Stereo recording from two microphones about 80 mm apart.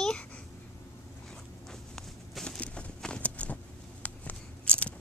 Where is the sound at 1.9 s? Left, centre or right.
Centre.